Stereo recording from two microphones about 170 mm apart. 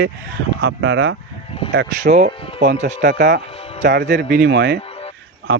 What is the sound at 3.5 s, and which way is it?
Music, 35° left (ahead or behind).